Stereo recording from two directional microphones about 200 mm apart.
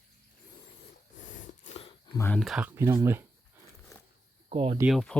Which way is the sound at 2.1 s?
10° left (ahead or behind).